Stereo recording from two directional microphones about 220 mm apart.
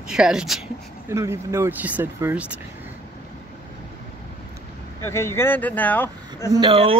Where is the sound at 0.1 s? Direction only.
5° right (ahead or behind).